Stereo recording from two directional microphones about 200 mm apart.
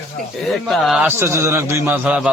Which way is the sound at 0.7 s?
5° right (ahead or behind).